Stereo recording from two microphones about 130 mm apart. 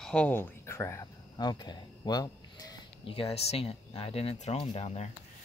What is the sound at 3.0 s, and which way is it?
Speech, 45° left (ahead or behind).